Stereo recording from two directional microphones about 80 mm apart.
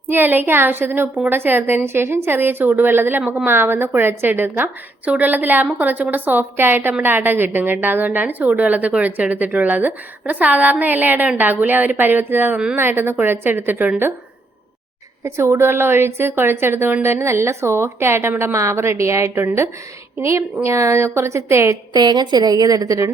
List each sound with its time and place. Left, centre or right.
0.1 s a woman's voice: right
15.2 s a woman's voice: right
21.9 s a woman's voice: right